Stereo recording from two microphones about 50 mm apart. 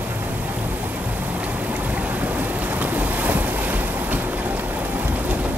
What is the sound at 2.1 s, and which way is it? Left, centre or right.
Waves, right.